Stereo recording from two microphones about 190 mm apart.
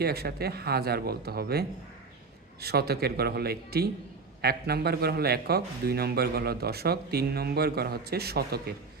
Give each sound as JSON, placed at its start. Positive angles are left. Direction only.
{"t": 0.0, "sound": "a man's voice", "side_deg": -55}